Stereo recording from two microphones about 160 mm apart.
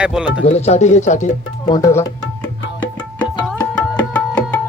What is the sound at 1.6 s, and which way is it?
Speech, 25° left (ahead or behind).